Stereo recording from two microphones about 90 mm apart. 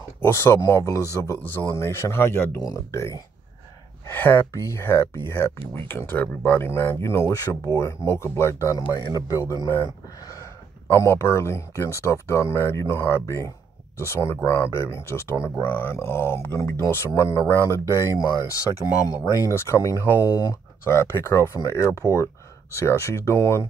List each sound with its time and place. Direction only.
0.2 s speech: 30° left (ahead or behind)
0.6 s speech: 40° left (ahead or behind)
4.1 s speech: 25° left (ahead or behind); by 20.5 s 45° left (ahead or behind)
20.9 s speech: 30° left (ahead or behind)
21.5 s speech: 40° left (ahead or behind)